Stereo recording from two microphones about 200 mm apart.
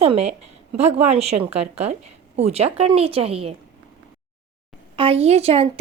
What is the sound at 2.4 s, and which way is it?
A woman's voice, 30° right (ahead or behind).